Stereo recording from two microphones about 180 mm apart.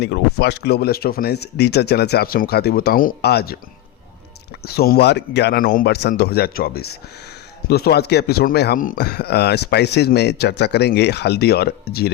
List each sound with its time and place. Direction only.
0.0 s speech: 65° left (ahead or behind)
4.6 s speech: 60° left (ahead or behind)
5.6 s speech: 55° left (ahead or behind)